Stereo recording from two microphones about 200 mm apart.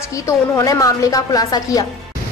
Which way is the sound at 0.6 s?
15° left (ahead or behind).